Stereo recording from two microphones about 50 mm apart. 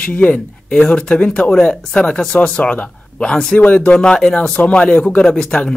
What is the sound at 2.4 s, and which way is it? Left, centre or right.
A man's voice, left.